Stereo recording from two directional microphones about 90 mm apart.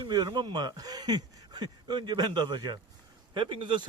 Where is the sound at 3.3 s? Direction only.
65° right (ahead or behind).